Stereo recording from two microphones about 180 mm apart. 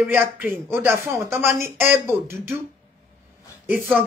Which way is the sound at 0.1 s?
10° right (ahead or behind).